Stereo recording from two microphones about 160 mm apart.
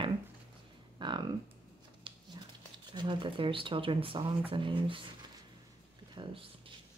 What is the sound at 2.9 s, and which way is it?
Speech, 30° right (ahead or behind).